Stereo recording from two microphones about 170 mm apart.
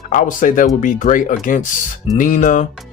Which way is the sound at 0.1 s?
50° left (ahead or behind).